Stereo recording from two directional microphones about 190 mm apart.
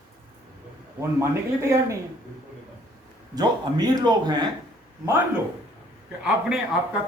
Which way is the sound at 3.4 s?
20° right (ahead or behind).